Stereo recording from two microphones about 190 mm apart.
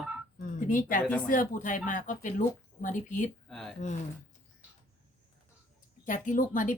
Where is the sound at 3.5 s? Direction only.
5° left (ahead or behind).